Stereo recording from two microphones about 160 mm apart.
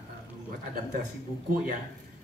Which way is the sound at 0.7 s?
65° right (ahead or behind).